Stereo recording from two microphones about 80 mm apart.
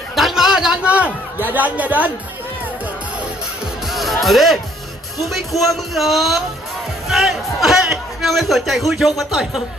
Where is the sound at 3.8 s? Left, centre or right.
Centre.